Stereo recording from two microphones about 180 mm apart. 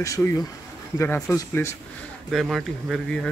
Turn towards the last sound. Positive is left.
turn(degrees=5)  # may be behind; listen again after turning